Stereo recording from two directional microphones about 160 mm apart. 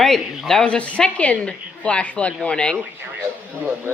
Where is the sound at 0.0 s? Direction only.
Centre (ahead or behind).